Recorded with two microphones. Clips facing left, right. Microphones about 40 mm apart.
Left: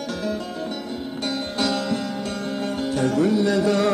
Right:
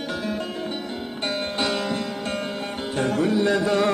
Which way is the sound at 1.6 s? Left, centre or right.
Right.